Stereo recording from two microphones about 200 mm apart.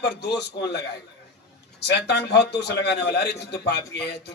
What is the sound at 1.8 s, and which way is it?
A man's voice, 55° left (ahead or behind).